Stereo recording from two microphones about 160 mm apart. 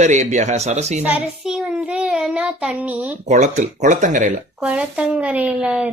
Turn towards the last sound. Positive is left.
turn(degrees=-5)  # may be behind; listen again after turning